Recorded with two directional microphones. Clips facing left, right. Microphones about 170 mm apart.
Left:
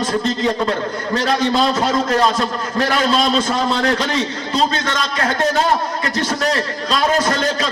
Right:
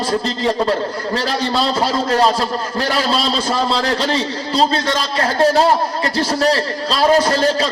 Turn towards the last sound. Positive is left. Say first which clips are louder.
# right 3 dB
turn(degrees=-30)  # may be behind; listen again after turning